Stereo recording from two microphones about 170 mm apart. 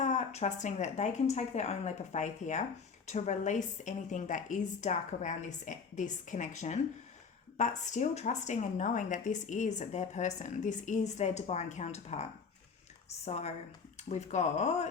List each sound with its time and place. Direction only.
0.0 s speech: 40° left (ahead or behind)